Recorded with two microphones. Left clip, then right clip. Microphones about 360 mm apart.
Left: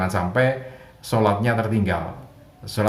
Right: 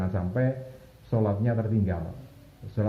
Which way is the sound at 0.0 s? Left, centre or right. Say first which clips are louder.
Left 10 dB; left.